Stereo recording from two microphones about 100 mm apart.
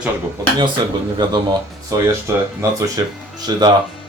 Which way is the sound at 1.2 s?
50° right (ahead or behind).